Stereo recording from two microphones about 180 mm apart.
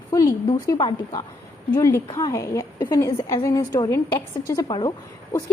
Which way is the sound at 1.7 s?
15° left (ahead or behind).